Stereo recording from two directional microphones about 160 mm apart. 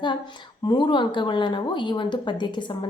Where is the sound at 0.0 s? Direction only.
30° left (ahead or behind).